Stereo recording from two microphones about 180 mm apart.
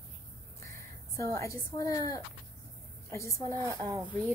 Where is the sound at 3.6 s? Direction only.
15° right (ahead or behind).